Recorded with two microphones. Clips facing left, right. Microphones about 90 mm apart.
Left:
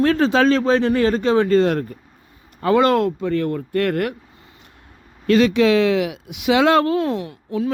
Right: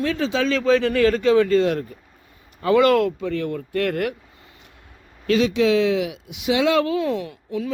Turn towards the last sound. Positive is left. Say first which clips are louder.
# left 3 dB
turn(degrees=30)  # may be behind; listen again after turning